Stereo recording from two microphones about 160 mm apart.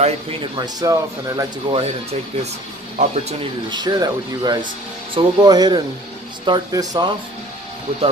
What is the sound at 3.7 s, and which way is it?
Speech, 25° right (ahead or behind).